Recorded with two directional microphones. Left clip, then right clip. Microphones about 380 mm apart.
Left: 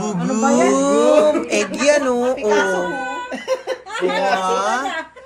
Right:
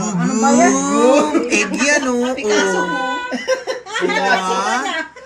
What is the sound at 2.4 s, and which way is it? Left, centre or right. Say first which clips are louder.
Speech: right 1 dB; centre.